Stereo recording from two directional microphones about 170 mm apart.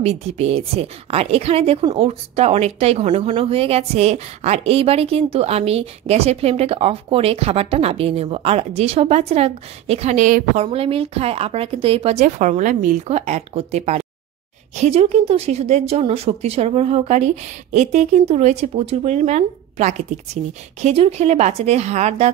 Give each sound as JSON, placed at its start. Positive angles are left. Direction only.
{"t": 0.0, "sound": "a woman's voice", "side_deg": -40}